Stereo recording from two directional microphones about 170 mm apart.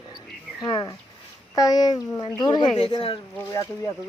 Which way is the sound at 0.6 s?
25° left (ahead or behind).